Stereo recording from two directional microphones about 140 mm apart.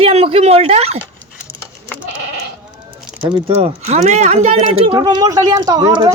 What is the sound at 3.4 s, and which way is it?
Speech, 50° right (ahead or behind).